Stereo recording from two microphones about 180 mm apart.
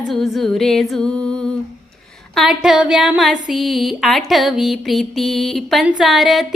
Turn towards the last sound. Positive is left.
turn(degrees=0)  # may be behind; listen again after turning